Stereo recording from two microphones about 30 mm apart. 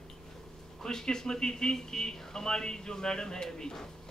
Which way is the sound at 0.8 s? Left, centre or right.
Left.